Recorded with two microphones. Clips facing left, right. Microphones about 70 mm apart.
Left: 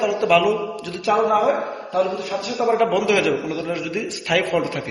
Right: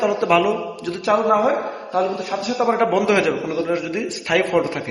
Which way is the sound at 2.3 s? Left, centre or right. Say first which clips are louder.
Right 1 dB; right.